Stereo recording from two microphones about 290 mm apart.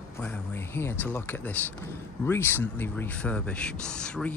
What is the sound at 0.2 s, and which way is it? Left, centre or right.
Speech, centre.